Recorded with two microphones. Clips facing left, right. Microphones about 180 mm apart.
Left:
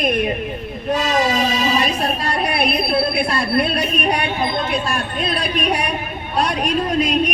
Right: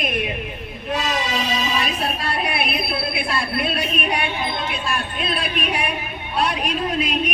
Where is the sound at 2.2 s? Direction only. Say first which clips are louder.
Left 4 dB; 40° left (ahead or behind).